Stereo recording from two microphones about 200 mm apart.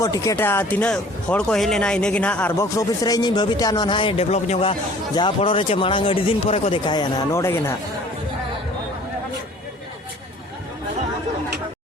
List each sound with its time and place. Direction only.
0.0 s speech: 15° left (ahead or behind)